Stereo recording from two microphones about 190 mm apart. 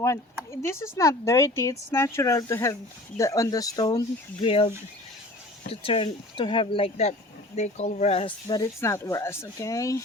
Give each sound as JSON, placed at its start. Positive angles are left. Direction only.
{"t": 0.6, "sound": "speech", "side_deg": 15}
{"t": 4.4, "sound": "speech", "side_deg": 30}